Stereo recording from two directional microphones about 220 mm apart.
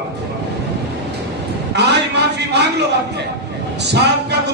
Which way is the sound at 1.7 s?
50° right (ahead or behind).